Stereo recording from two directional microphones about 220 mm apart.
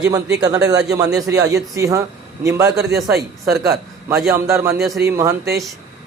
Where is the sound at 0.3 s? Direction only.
15° right (ahead or behind).